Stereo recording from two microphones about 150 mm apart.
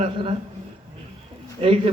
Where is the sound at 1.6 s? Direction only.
40° right (ahead or behind).